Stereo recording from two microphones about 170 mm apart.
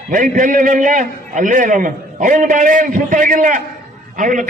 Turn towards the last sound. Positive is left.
turn(degrees=-50)  # may be behind; listen again after turning